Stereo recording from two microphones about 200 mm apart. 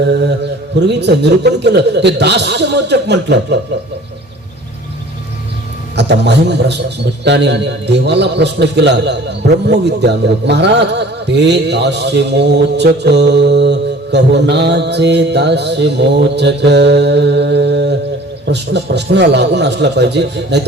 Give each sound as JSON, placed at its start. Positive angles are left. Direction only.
{"t": 0.0, "sound": "mantra", "side_deg": -60}
{"t": 0.9, "sound": "a man's voice", "side_deg": -55}
{"t": 6.0, "sound": "a man's voice", "side_deg": -60}